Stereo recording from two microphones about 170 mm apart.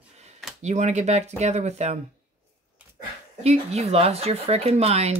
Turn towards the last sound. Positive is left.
turn(degrees=-35)  # may be behind; listen again after turning